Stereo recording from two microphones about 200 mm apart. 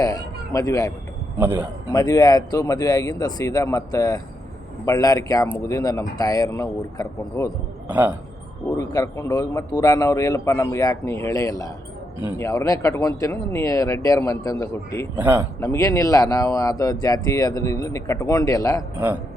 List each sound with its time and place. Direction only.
0.0 s a sound: 15° left (ahead or behind)
1.4 s speech: 10° right (ahead or behind)
1.9 s speech: 20° left (ahead or behind)
7.9 s speech: 10° right (ahead or behind)
8.8 s speech: 15° left (ahead or behind)
15.1 s speech: 10° right (ahead or behind)
15.6 s speech: 15° left (ahead or behind)